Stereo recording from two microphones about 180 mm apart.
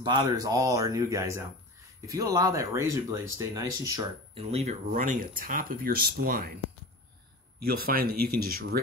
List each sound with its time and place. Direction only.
0.0 s speech: 25° right (ahead or behind)
4.4 s speech: 35° right (ahead or behind); by 6.5 s 55° right (ahead or behind)
7.6 s speech: 55° right (ahead or behind)